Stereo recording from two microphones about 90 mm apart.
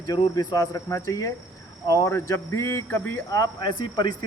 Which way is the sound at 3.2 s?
40° left (ahead or behind).